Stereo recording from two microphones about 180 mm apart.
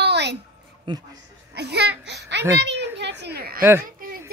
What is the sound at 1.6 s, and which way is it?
A child's voice, 70° right (ahead or behind).